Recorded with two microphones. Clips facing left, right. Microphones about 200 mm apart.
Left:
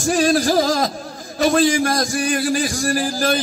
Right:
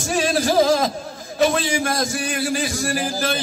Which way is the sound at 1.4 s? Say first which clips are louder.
Left 3 dB; 45° left (ahead or behind).